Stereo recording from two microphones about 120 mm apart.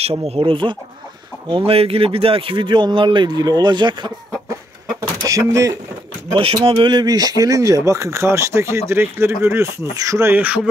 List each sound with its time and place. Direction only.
0.0 s a man's voice: 55° right (ahead or behind); by 4.6 s 40° right (ahead or behind)
5.2 s speech: 25° right (ahead or behind)
6.3 s speech: 50° right (ahead or behind); by 10.6 s 15° right (ahead or behind)